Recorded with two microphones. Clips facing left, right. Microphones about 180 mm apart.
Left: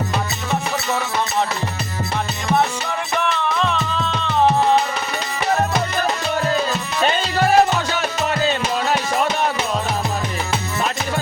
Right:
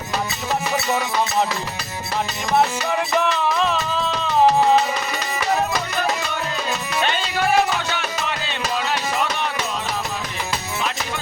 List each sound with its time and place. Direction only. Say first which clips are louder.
3.2 s music: even; 5° right (ahead or behind)
7.0 s music: left 5 dB; 40° left (ahead or behind)